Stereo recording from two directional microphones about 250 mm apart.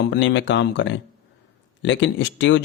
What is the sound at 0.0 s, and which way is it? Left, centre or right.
Speech, left.